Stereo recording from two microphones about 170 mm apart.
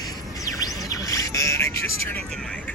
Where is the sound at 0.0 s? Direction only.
20° left (ahead or behind).